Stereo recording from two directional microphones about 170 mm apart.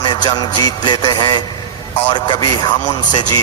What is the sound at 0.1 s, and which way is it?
A man's voice, 25° left (ahead or behind).